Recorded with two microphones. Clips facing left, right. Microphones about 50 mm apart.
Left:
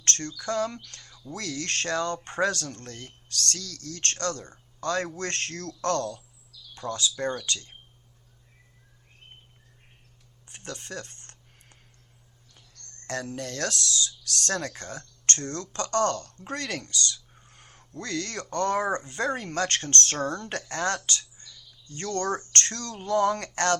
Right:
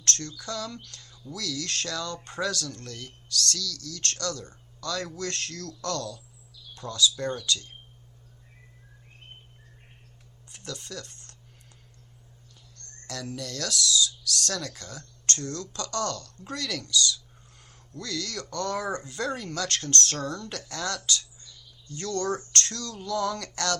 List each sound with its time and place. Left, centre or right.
0.0 s speech: left
10.5 s a sound: left
13.1 s speech: left